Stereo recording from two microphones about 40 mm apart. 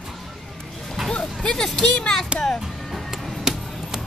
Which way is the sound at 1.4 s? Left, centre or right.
Centre.